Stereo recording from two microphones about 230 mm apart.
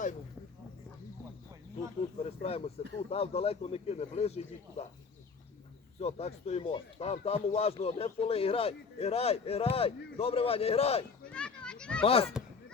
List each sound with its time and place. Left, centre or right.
2.1 s speech: left
6.0 s speech: left
11.3 s a child's voice: centre
12.0 s speech: left